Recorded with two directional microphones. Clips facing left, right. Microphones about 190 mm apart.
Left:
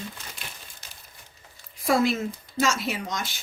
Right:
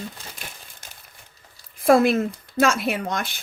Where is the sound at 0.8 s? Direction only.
50° right (ahead or behind).